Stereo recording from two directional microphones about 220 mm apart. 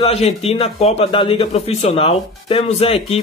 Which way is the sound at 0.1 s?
25° left (ahead or behind).